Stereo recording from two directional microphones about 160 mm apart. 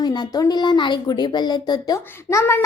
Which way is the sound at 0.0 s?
25° left (ahead or behind).